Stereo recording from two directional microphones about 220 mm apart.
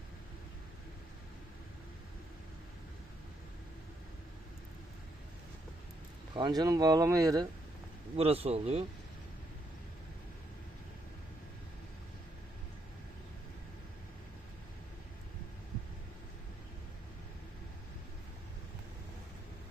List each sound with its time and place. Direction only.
6.3 s speech: 20° right (ahead or behind)
8.1 s speech: 25° right (ahead or behind)